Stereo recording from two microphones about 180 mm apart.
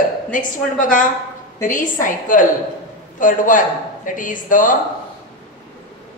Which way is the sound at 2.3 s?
45° left (ahead or behind).